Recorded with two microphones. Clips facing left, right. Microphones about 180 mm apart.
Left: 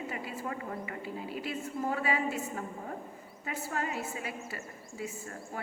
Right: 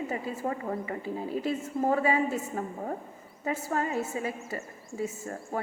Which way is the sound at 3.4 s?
35° right (ahead or behind).